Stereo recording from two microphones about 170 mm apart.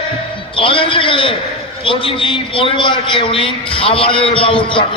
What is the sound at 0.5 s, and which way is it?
A man's voice, 30° left (ahead or behind).